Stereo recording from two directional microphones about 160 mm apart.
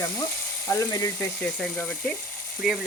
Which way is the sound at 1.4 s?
5° left (ahead or behind).